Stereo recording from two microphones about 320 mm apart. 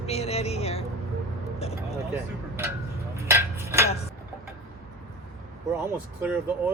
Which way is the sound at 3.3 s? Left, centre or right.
Centre.